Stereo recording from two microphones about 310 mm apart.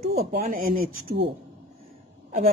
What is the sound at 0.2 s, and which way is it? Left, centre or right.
Speech, right.